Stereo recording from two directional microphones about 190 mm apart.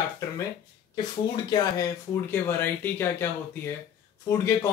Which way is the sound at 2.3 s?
10° left (ahead or behind).